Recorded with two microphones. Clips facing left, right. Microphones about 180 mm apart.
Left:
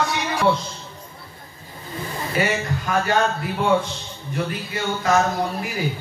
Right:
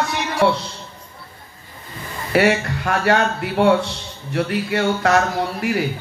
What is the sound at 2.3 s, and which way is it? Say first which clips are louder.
A man's voice: right 7 dB; 70° right (ahead or behind).